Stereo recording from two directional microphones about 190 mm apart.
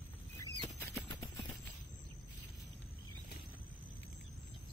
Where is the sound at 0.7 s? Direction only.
10° left (ahead or behind).